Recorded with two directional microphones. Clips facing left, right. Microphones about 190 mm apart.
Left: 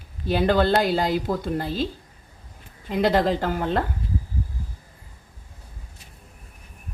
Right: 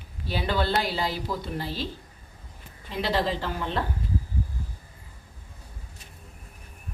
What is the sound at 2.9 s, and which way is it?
Speech, 50° left (ahead or behind).